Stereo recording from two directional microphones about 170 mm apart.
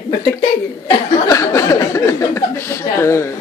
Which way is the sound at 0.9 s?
20° left (ahead or behind).